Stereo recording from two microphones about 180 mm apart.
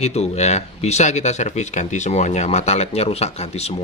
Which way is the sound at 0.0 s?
35° left (ahead or behind).